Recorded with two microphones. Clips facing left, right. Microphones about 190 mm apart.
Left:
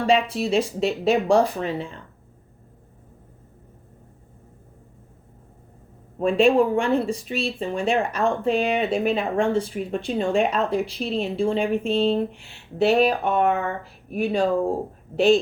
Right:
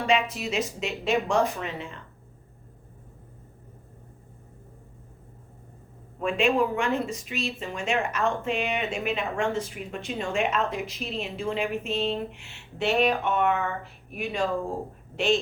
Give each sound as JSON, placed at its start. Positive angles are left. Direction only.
{"t": 0.0, "sound": "speech", "side_deg": 35}
{"t": 6.1, "sound": "a woman's voice", "side_deg": 35}